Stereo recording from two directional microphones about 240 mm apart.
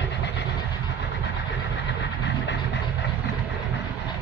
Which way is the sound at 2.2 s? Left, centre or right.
Left.